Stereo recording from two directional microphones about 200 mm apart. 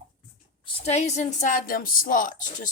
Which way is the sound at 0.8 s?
35° left (ahead or behind).